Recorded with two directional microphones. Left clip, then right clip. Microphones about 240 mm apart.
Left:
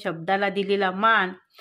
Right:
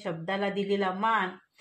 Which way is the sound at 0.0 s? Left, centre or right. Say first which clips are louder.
Left 7 dB; left.